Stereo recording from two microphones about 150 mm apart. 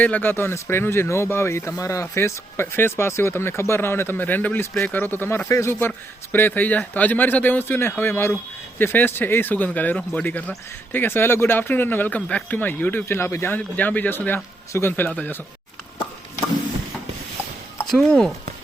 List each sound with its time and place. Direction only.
0.0 s speech: 10° left (ahead or behind)
17.8 s speech: 5° left (ahead or behind)